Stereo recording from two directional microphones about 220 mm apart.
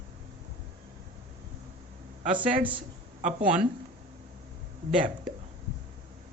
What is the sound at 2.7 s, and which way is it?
Speech, 30° right (ahead or behind).